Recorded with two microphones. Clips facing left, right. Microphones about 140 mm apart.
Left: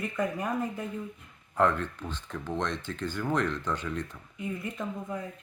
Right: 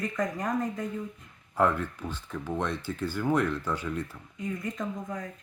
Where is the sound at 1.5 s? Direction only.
10° right (ahead or behind).